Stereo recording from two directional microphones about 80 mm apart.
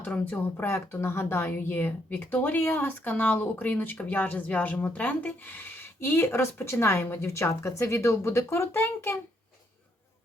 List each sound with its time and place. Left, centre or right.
0.0 s speech: left